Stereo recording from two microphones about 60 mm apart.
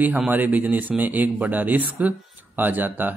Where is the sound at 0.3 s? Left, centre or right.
Right.